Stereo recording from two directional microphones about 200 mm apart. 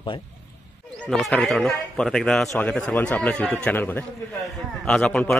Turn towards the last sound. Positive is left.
turn(degrees=5)  # may be behind; listen again after turning